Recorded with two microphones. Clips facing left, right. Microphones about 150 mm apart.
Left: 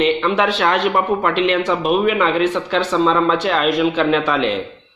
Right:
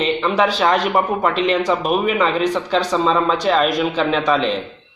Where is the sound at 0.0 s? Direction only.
Centre (ahead or behind).